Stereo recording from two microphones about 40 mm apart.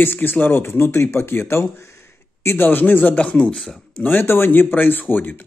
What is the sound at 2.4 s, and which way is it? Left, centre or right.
Speech, left.